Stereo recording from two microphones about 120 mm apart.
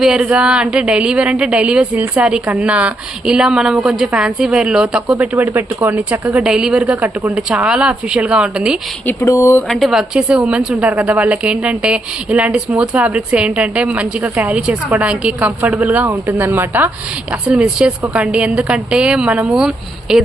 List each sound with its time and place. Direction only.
0.0 s a woman's voice: 5° right (ahead or behind)
9.2 s speech: 25° left (ahead or behind)
9.6 s a woman's voice: centre (ahead or behind)